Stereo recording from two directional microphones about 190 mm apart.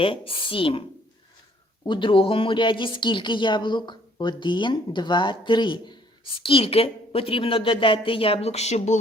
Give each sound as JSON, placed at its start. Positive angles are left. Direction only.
{"t": 0.0, "sound": "speech", "side_deg": 30}
{"t": 1.9, "sound": "speech", "side_deg": 25}